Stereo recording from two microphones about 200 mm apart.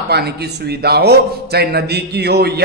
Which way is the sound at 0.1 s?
55° right (ahead or behind).